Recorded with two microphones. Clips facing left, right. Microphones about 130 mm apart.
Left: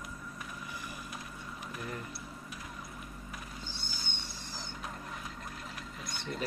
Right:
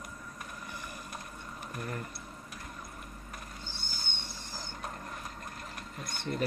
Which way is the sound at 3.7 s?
55° right (ahead or behind).